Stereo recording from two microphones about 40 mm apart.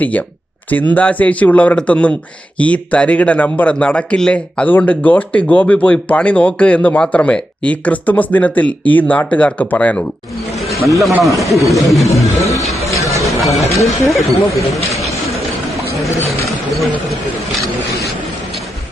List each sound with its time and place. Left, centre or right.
0.0 s speech: left
10.6 s a man's voice: centre
12.7 s a sound: centre